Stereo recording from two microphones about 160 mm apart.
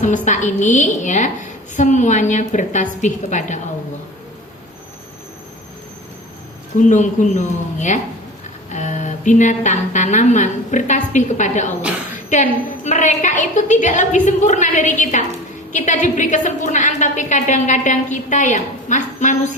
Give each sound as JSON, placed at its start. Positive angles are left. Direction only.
{"t": 0.0, "sound": "a woman's voice", "side_deg": 50}
{"t": 6.7, "sound": "a woman's voice", "side_deg": 50}